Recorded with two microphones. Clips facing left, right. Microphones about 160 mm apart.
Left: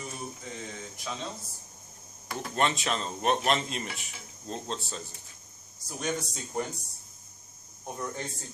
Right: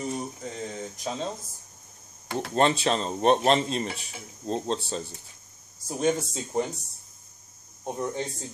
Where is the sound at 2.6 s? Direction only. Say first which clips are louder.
Right 6 dB; 30° right (ahead or behind).